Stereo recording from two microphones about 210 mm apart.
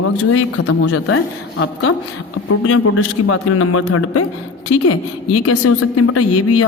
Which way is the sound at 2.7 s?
90° left.